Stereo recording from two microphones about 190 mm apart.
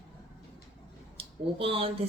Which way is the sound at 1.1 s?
30° right (ahead or behind).